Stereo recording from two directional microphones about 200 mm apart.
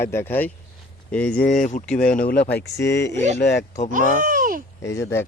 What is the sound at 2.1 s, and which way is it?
Speech, 45° left (ahead or behind).